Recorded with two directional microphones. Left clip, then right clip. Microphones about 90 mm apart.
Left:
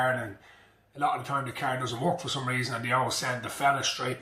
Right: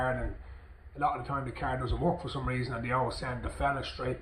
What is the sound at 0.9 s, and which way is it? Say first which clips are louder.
Speech: left 3 dB; 30° left (ahead or behind).